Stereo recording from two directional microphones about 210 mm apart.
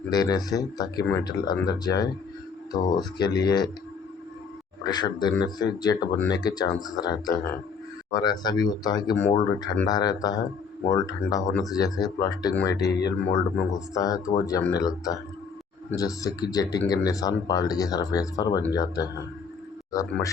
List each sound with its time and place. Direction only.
0.1 s speech: 20° left (ahead or behind)
4.8 s speech: 20° left (ahead or behind)